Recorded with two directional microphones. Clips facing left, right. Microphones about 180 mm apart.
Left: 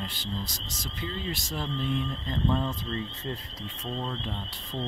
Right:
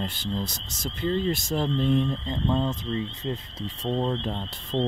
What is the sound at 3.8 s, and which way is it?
Speech, 40° right (ahead or behind).